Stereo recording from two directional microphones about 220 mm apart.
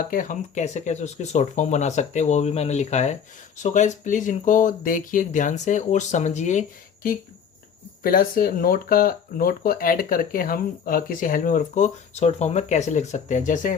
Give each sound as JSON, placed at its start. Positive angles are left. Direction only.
{"t": 0.1, "sound": "speech", "side_deg": 35}